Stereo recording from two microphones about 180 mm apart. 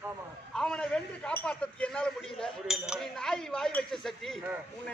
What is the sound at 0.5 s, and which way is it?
A man's voice, 5° left (ahead or behind).